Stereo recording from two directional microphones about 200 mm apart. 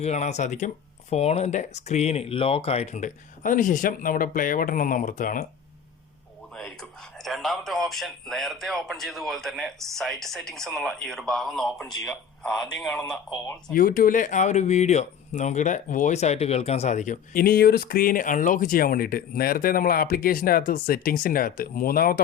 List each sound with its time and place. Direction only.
0.0 s speech: 35° left (ahead or behind)
7.3 s a man's voice: centre (ahead or behind)
13.7 s speech: 45° left (ahead or behind)